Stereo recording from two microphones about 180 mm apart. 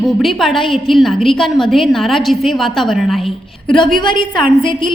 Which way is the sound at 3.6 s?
25° left (ahead or behind).